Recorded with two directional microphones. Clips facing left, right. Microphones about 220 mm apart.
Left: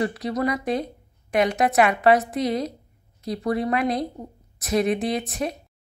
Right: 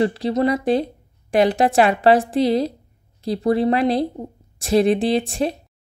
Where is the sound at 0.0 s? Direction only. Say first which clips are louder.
Right 5 dB; 30° right (ahead or behind).